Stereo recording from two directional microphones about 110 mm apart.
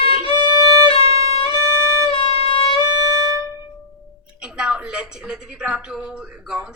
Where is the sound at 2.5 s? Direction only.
50° left (ahead or behind).